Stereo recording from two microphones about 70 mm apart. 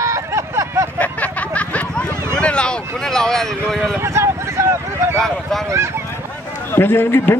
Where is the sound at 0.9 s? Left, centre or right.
Left; by 4.0 s centre.